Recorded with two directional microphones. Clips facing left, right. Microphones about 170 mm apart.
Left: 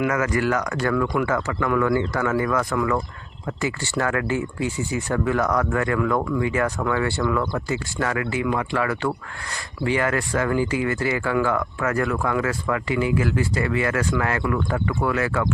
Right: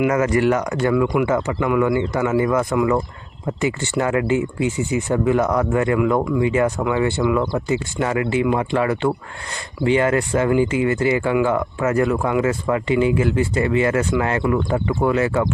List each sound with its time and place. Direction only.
0.1 s speech: 25° right (ahead or behind)